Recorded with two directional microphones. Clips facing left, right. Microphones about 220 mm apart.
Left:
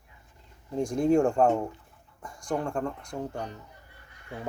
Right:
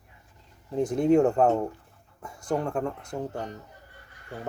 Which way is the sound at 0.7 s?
5° right (ahead or behind).